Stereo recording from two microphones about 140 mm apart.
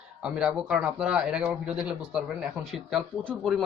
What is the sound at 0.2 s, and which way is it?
Speech, 5° right (ahead or behind).